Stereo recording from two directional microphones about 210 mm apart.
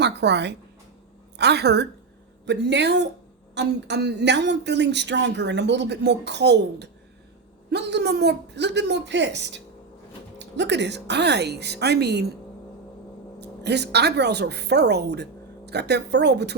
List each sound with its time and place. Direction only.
0.0 s a woman's voice: 55° right (ahead or behind)
13.4 s a woman's voice: 55° right (ahead or behind)